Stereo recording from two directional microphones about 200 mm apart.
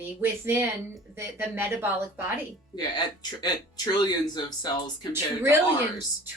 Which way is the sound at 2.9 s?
20° left (ahead or behind).